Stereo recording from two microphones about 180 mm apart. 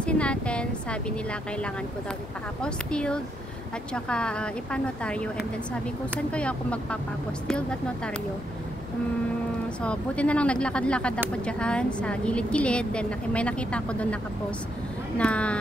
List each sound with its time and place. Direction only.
0.0 s a woman's voice: 5° left (ahead or behind)
2.6 s a woman's voice: 5° left (ahead or behind)
9.8 s a woman's voice: 5° left (ahead or behind)
15.1 s a woman's voice: 5° left (ahead or behind)